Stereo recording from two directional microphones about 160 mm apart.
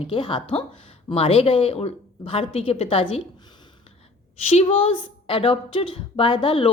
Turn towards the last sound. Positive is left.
turn(degrees=35)  # may be behind; listen again after turning